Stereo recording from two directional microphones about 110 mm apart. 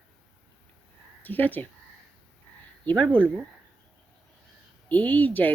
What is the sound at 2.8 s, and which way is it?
Speech, 10° left (ahead or behind).